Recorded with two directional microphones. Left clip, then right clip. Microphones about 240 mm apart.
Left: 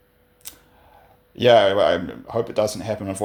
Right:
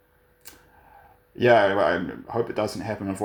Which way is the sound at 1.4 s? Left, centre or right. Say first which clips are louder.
Left 4 dB; left.